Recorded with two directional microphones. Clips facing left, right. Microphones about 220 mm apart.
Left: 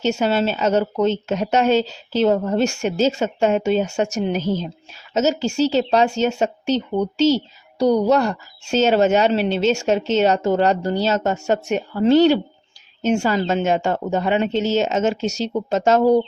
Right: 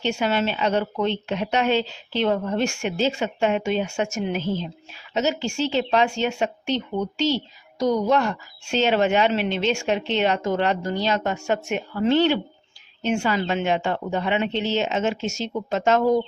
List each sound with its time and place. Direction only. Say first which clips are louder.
0.0 s speech: left 4 dB; 40° left (ahead or behind)